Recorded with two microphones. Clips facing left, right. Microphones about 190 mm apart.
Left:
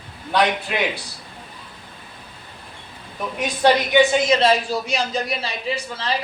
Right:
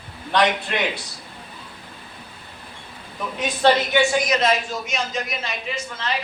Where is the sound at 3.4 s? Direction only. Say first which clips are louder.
Left 1 dB; 15° left (ahead or behind).